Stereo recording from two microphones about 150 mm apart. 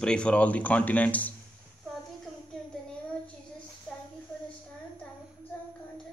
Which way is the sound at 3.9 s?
5° left (ahead or behind).